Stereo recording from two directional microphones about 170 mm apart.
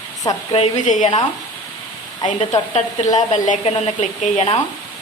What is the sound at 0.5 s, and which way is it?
Speech, 45° left (ahead or behind).